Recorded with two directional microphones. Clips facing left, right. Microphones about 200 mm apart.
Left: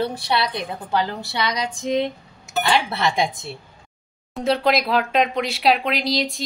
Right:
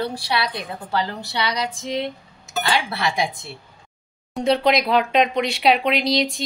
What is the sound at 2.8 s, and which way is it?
Speech, 20° left (ahead or behind).